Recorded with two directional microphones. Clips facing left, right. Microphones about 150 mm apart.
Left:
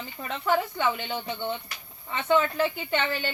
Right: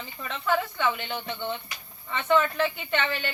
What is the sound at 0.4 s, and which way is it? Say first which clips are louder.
A woman's voice: left 1 dB; 15° left (ahead or behind).